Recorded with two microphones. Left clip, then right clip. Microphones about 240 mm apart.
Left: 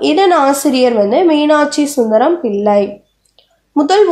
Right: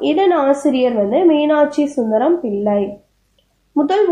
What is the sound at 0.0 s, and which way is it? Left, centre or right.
A woman's voice, left.